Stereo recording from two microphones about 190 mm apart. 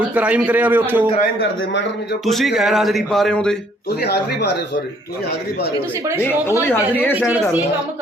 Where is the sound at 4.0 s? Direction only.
60° left (ahead or behind).